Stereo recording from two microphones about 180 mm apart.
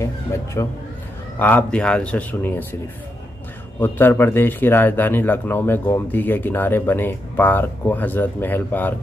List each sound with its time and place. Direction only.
0.0 s a sound: 15° left (ahead or behind)
1.4 s speech: 10° left (ahead or behind)
3.8 s speech: 10° left (ahead or behind)